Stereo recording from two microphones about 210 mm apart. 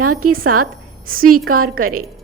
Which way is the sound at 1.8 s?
90° right.